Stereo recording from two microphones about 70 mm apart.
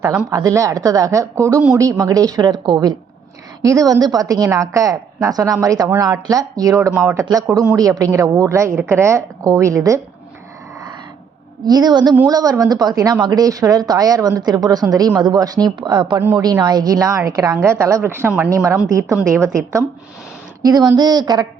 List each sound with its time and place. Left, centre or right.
0.3 s a woman's voice: right
3.6 s a woman's voice: right
11.6 s a woman's voice: right
12.2 s speech: right
15.2 s speech: right
16.3 s speech: right
17.7 s a woman's voice: right
18.0 s speech: right
18.3 s a woman's voice: right
20.6 s speech: right